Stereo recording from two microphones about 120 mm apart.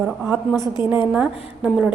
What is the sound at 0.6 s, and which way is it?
A woman's voice, 15° right (ahead or behind).